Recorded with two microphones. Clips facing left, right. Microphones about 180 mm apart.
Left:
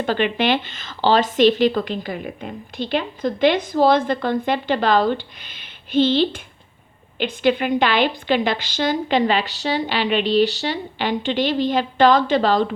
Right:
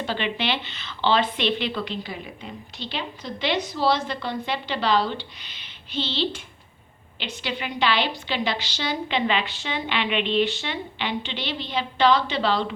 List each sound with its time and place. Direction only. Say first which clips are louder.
0.0 s speech: left 7 dB; 50° left (ahead or behind)